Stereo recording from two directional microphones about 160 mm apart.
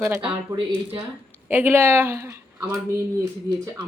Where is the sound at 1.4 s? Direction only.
10° right (ahead or behind).